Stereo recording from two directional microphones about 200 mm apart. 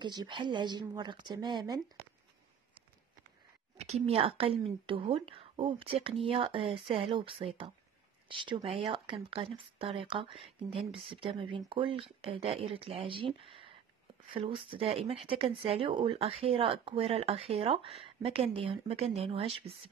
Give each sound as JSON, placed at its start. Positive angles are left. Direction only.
{"t": 0.0, "sound": "speech", "side_deg": -20}
{"t": 3.7, "sound": "speech", "side_deg": -30}